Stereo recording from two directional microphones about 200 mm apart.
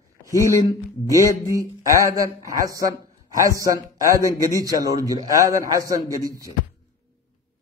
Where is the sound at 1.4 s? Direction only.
15° right (ahead or behind).